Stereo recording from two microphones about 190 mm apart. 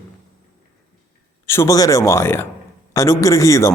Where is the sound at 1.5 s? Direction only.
15° left (ahead or behind).